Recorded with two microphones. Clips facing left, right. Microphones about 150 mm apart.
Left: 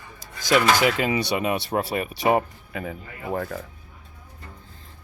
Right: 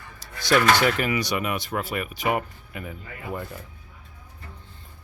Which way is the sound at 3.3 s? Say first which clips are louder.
Left 7 dB; 75° left (ahead or behind).